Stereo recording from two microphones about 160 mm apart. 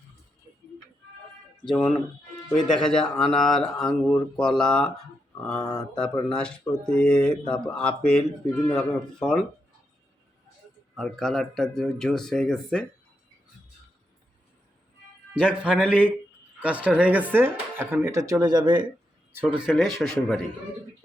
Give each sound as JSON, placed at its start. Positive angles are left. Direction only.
{"t": 1.7, "sound": "speech", "side_deg": 5}
{"t": 2.5, "sound": "speech", "side_deg": 30}
{"t": 2.8, "sound": "speech", "side_deg": 5}
{"t": 10.9, "sound": "speech", "side_deg": 0}
{"t": 15.4, "sound": "speech", "side_deg": -5}
{"t": 19.6, "sound": "speech", "side_deg": 0}